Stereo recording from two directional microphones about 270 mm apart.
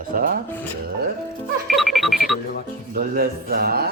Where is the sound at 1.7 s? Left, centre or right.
Centre.